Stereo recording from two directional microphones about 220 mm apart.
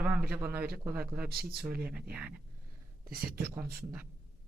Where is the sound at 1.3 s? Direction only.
45° right (ahead or behind).